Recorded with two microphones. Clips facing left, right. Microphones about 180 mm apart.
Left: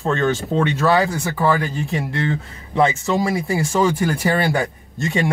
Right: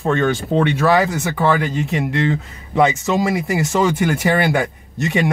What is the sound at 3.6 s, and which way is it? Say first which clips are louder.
Speech: even; 75° right (ahead or behind).